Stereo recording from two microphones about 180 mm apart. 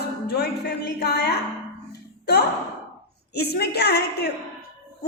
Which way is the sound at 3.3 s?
65° left (ahead or behind).